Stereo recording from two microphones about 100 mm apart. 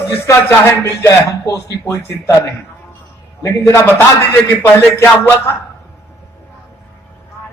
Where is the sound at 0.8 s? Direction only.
30° left (ahead or behind).